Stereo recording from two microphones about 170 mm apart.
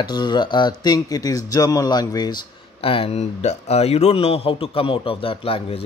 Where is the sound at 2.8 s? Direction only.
35° left (ahead or behind).